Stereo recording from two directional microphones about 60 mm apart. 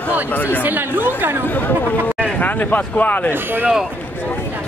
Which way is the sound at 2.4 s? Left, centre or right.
Left.